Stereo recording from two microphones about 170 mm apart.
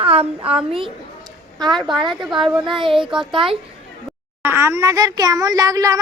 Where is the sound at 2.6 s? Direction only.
30° right (ahead or behind).